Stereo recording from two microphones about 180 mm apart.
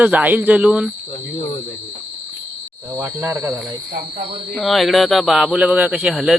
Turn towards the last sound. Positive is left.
turn(degrees=-5)  # may be behind; listen again after turning